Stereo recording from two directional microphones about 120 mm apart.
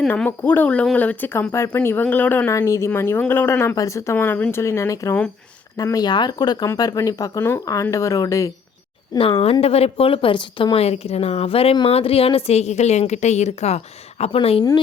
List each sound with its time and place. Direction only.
0.1 s speech: 15° left (ahead or behind)
2.5 s speech: 25° left (ahead or behind)
9.1 s a woman's voice: 50° left (ahead or behind); by 14.3 s 65° left (ahead or behind)
14.3 s speech: 55° left (ahead or behind)